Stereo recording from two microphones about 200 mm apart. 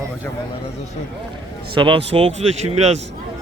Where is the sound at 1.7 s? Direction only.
25° right (ahead or behind).